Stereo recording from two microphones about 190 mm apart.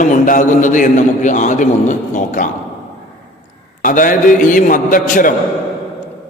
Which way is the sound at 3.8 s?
45° left (ahead or behind).